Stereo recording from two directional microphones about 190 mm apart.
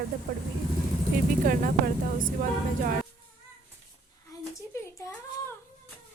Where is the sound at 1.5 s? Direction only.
45° right (ahead or behind).